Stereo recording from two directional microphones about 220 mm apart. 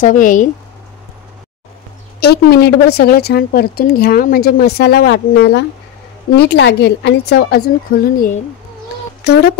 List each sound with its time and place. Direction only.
0.0 s speech: 35° left (ahead or behind)
2.1 s a woman's voice: 45° left (ahead or behind)
9.2 s speech: 45° left (ahead or behind)